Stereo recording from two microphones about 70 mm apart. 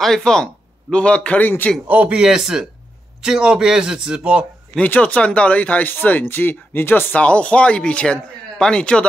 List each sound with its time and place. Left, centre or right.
0.0 s a man's voice: centre
1.9 s a man's voice: right
2.2 s a man's voice: centre
4.8 s speech: left